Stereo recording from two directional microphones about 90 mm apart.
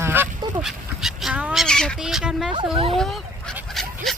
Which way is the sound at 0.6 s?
5° right (ahead or behind).